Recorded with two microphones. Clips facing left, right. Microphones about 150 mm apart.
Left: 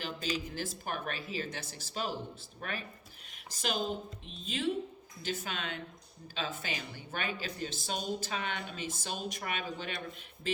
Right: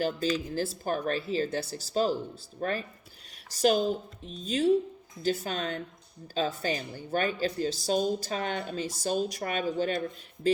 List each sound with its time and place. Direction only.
0.0 s speech: 40° right (ahead or behind)